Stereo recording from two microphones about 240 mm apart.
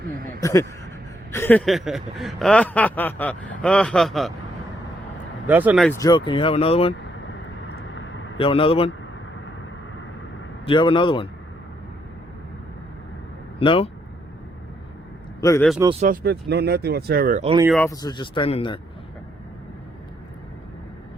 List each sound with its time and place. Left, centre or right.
0.1 s a sound: right
0.4 s speech: centre
5.5 s speech: centre
5.9 s speech: centre
7.8 s vehicle: left
8.4 s speech: left
10.7 s speech: left
13.6 s speech: left
15.4 s speech: centre
15.8 s speech: right
16.0 s speech: right
17.4 s speech: right
17.7 s speech: centre